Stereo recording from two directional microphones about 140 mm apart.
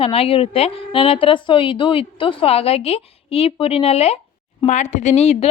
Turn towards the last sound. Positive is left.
turn(degrees=50)  # may be behind; listen again after turning